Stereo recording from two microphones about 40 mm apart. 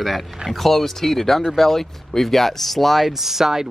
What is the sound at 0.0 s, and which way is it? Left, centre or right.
Speech, centre.